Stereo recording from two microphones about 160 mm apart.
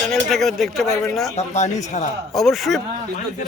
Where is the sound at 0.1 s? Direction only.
Centre (ahead or behind).